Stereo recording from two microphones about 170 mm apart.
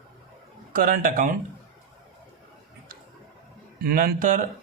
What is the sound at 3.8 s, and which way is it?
Speech, 60° right (ahead or behind).